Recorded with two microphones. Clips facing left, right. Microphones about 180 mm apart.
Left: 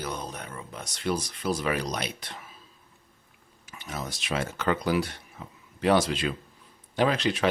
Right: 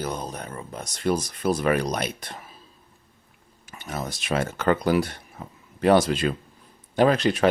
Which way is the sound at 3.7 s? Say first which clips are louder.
Right 4 dB; 50° right (ahead or behind).